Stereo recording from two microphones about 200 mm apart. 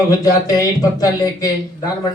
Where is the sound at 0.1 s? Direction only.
20° left (ahead or behind).